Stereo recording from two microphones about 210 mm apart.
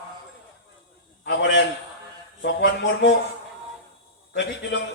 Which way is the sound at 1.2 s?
55° left (ahead or behind).